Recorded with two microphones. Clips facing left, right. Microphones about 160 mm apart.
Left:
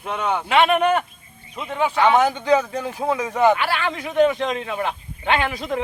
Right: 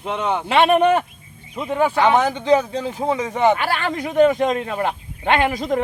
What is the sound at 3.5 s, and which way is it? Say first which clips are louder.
Speech: right 1 dB; 45° right (ahead or behind).